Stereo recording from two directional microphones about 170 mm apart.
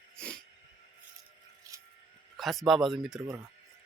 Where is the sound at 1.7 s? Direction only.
20° right (ahead or behind).